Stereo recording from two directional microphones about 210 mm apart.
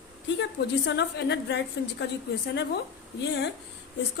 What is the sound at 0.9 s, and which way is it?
A woman's voice, 55° left (ahead or behind).